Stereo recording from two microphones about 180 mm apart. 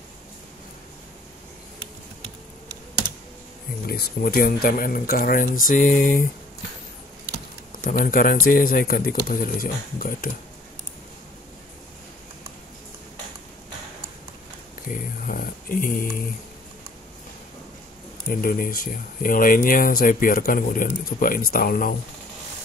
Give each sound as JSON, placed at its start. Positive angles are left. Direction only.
{"t": 3.8, "sound": "speech", "side_deg": 60}
{"t": 7.7, "sound": "speech", "side_deg": 50}
{"t": 14.9, "sound": "speech", "side_deg": 50}
{"t": 18.3, "sound": "speech", "side_deg": 55}